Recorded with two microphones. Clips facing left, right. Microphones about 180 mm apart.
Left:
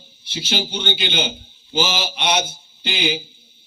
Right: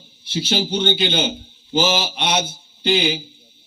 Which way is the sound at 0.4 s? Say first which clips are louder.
Right 4 dB; 40° right (ahead or behind).